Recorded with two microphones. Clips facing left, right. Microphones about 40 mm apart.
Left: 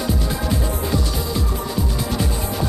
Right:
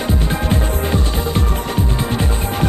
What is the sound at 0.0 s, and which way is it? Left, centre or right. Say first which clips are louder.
Music: right 3 dB; right.